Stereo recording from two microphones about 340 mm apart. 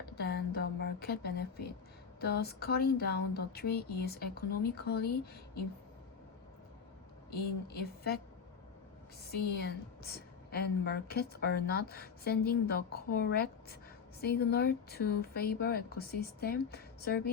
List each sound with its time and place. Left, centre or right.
0.2 s a sound: left
2.2 s a woman's voice: left
7.3 s a woman's voice: left
9.3 s a woman's voice: left